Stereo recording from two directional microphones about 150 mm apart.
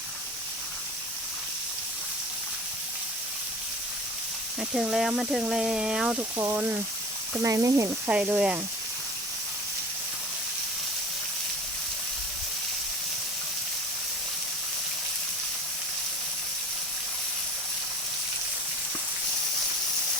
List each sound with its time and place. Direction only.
4.7 s speech: 5° right (ahead or behind)
6.3 s speech: 15° right (ahead or behind)
8.1 s speech: 10° right (ahead or behind)